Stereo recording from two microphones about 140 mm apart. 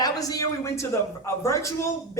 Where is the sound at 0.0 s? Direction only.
25° left (ahead or behind).